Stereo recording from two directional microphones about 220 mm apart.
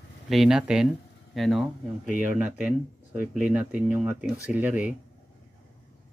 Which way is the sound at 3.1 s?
40° left (ahead or behind).